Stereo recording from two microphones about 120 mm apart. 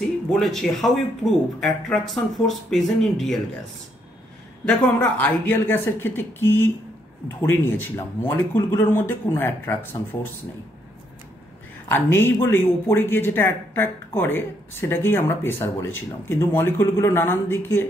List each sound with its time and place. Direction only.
0.3 s speech: centre (ahead or behind)
5.2 s speech: 15° left (ahead or behind)
11.9 s speech: 20° left (ahead or behind)